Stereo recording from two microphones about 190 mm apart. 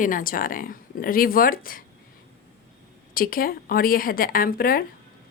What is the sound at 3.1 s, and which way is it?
Speech, 50° left (ahead or behind).